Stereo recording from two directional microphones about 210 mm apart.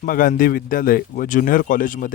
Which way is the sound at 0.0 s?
40° left (ahead or behind).